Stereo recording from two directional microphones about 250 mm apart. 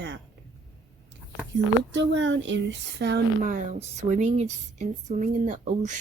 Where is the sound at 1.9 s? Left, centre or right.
Right.